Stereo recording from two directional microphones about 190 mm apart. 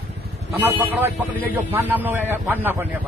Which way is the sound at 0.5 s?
10° right (ahead or behind).